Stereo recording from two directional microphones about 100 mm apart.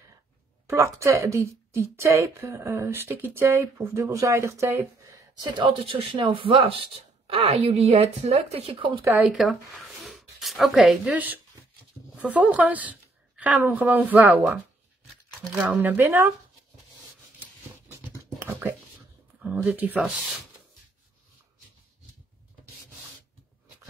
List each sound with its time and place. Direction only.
0.7 s a woman's voice: 30° right (ahead or behind)
5.6 s speech: 50° right (ahead or behind); by 8.5 s 90° right
8.7 s speech: 55° right (ahead or behind)
9.2 s speech: 5° right (ahead or behind)
11.1 s a woman's voice: 15° right (ahead or behind)
15.7 s speech: 15° right (ahead or behind)
18.1 s whispering: 20° right (ahead or behind)
19.4 s speech: 10° right (ahead or behind)